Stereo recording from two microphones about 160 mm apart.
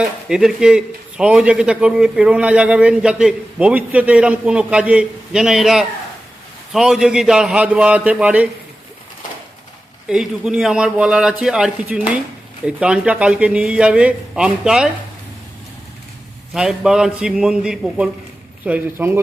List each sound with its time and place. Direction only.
0.0 s a man's voice: 5° right (ahead or behind)
10.1 s a man's voice: 5° right (ahead or behind)
16.6 s a man's voice: 5° right (ahead or behind)